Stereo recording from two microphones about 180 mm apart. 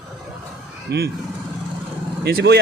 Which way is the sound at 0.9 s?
65° right (ahead or behind).